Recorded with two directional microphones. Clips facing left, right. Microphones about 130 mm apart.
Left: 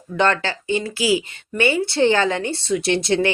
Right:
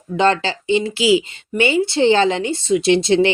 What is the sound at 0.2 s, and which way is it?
Speech, 20° right (ahead or behind).